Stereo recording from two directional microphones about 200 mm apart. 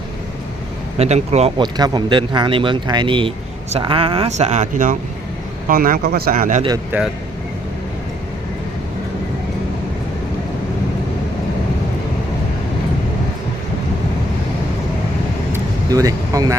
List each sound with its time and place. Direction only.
0.9 s speech: 30° right (ahead or behind)
15.5 s vehicle: 15° right (ahead or behind)